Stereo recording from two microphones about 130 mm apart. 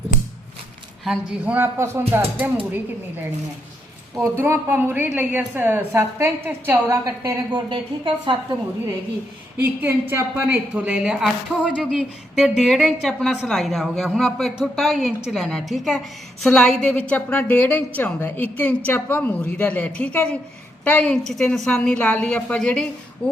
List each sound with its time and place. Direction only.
1.0 s a woman's voice: centre (ahead or behind)
1.5 s a woman's voice: 15° right (ahead or behind)
4.1 s a woman's voice: 20° right (ahead or behind)
7.7 s a woman's voice: 40° right (ahead or behind)
9.6 s a woman's voice: 15° right (ahead or behind)
11.6 s a woman's voice: 5° left (ahead or behind)